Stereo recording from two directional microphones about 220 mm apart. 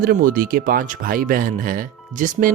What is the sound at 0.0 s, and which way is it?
Speech, 40° right (ahead or behind).